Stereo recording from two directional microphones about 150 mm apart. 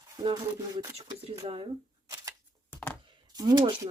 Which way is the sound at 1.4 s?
40° right (ahead or behind).